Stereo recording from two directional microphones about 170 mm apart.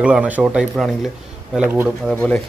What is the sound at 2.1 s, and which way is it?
Speech, 10° left (ahead or behind).